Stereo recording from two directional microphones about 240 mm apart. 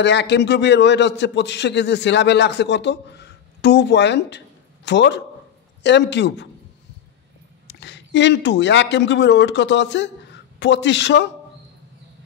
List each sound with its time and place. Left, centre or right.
0.0 s a man's voice: left
7.6 s a man's voice: left